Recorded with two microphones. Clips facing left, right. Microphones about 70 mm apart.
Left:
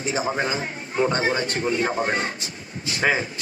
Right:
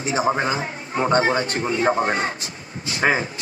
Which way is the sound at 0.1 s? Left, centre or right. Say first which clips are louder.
Right 5 dB; right.